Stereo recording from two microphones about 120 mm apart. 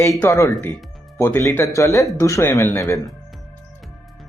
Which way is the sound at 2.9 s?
Centre (ahead or behind).